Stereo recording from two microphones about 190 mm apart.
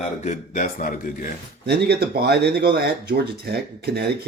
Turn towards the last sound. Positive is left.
turn(degrees=-55)  # may be behind; listen again after turning